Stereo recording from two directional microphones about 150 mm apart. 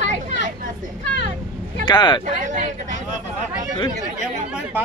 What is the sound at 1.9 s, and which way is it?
Speech, 30° left (ahead or behind).